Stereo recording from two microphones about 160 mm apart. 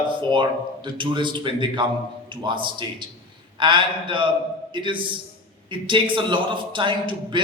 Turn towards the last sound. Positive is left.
turn(degrees=-30)  # may be behind; listen again after turning